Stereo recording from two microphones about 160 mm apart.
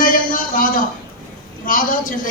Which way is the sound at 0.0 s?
60° left (ahead or behind).